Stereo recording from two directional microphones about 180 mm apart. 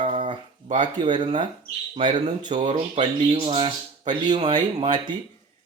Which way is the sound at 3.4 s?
30° right (ahead or behind).